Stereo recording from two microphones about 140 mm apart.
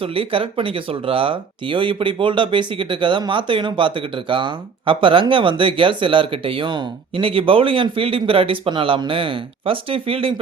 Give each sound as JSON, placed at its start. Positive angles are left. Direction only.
{"t": 0.0, "sound": "speech", "side_deg": -40}